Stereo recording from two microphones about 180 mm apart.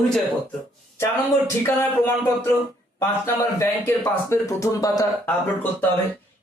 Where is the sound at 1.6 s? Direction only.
15° left (ahead or behind).